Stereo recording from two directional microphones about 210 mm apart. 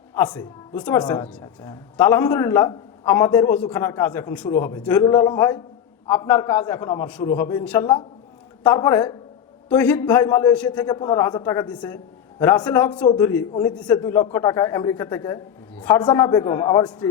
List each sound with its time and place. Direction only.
0.1 s a woman's voice: 5° left (ahead or behind)
5.0 s a man's voice: 25° left (ahead or behind); by 10.8 s 5° left (ahead or behind)
10.8 s a man's voice: 20° left (ahead or behind)
14.0 s a man's voice: 20° left (ahead or behind)